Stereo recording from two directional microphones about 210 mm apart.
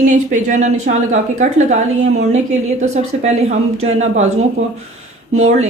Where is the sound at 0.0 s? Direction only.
35° right (ahead or behind).